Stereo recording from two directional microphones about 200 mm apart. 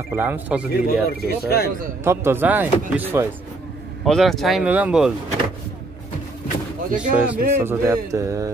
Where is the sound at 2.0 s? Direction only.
10° right (ahead or behind).